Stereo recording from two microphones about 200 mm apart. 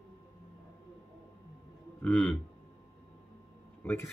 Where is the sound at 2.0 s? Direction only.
5° left (ahead or behind).